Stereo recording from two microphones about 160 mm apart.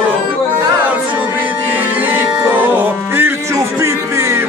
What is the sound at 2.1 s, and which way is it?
Music, 10° right (ahead or behind).